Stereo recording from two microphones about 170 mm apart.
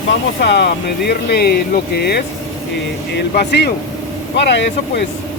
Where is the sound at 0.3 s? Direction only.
80° left.